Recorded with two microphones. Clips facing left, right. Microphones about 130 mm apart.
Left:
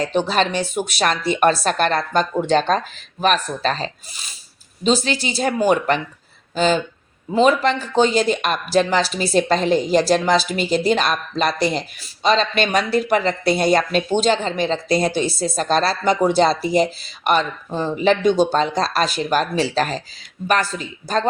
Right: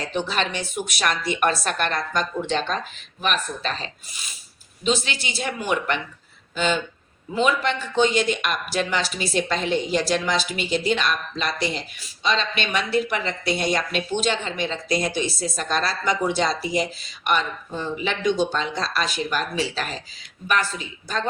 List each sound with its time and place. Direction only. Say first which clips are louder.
0.0 s speech: left 6 dB; 35° left (ahead or behind)